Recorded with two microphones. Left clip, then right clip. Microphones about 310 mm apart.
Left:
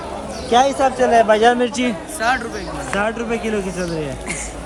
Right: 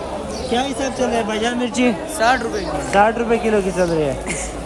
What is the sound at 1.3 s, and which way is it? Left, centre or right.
Speech, centre.